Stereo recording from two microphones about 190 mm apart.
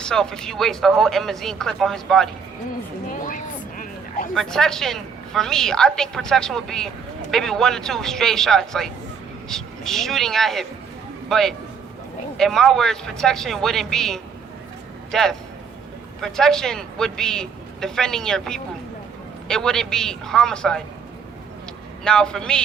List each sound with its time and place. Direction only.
0.0 s a woman's voice: 5° left (ahead or behind)
3.1 s a sound: 45° left (ahead or behind)
4.4 s a woman's voice: centre (ahead or behind)
22.0 s a woman's voice: 5° left (ahead or behind)